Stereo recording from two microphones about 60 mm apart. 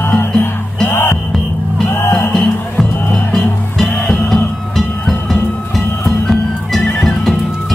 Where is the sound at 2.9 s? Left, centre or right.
Left.